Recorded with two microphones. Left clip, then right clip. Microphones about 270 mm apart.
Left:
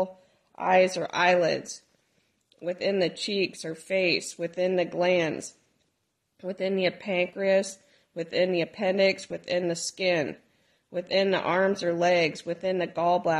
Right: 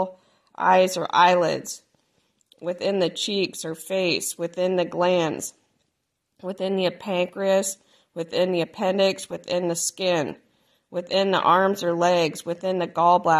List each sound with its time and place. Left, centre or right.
0.6 s speech: right